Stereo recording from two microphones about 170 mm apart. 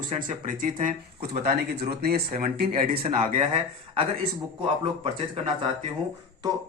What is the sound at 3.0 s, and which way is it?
Speech, 40° right (ahead or behind).